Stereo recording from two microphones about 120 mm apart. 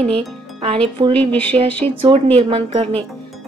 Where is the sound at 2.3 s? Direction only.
55° right (ahead or behind).